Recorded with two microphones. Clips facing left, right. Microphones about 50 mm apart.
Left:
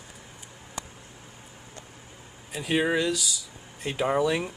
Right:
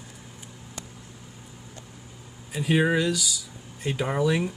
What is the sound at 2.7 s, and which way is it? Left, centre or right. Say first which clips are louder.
Speech: right 2 dB; centre.